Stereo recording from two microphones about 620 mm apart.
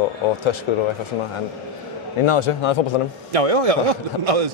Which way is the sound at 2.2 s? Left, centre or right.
Left.